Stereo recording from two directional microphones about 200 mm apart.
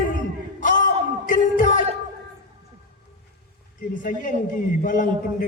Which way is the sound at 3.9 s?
40° left (ahead or behind).